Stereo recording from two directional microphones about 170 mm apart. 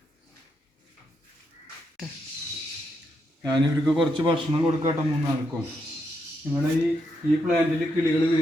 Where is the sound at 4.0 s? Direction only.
25° right (ahead or behind).